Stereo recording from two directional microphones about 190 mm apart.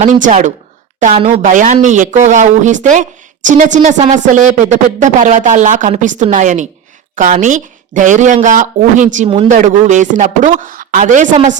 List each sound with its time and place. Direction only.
0.0 s a woman's voice: 40° right (ahead or behind)